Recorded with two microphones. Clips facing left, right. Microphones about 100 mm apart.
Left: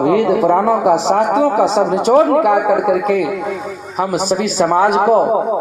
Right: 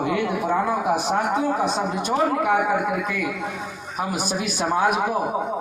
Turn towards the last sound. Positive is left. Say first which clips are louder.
# left 11 dB
turn(degrees=90)